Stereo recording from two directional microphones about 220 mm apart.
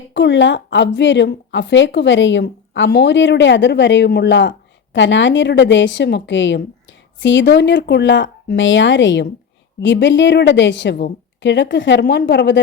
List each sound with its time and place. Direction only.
0.1 s a woman's voice: 55° left (ahead or behind)